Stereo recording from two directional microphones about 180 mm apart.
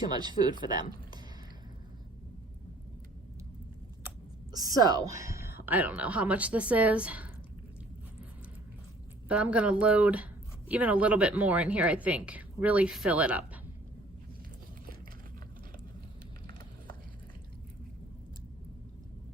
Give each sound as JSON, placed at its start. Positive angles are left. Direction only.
{"t": 0.1, "sound": "speech", "side_deg": -25}
{"t": 4.5, "sound": "a woman's voice", "side_deg": -20}
{"t": 9.3, "sound": "a woman's voice", "side_deg": -5}